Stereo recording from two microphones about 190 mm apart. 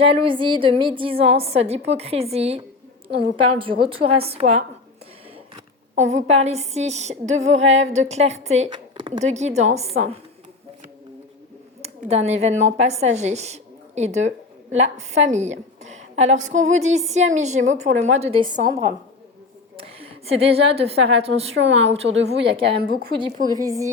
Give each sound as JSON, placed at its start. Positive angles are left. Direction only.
{"t": 0.0, "sound": "a woman's voice", "side_deg": -30}
{"t": 6.0, "sound": "a woman's voice", "side_deg": -35}
{"t": 8.7, "sound": "a sound", "side_deg": -25}
{"t": 9.2, "sound": "a woman's voice", "side_deg": -35}
{"t": 11.8, "sound": "a woman's voice", "side_deg": -35}
{"t": 19.7, "sound": "a woman's voice", "side_deg": -30}
{"t": 21.6, "sound": "a woman's voice", "side_deg": -75}
{"t": 21.8, "sound": "a woman's voice", "side_deg": -35}
{"t": 22.6, "sound": "speech", "side_deg": -55}
{"t": 23.5, "sound": "a woman's voice", "side_deg": -20}